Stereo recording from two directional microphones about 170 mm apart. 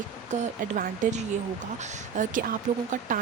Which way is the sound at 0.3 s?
45° right (ahead or behind).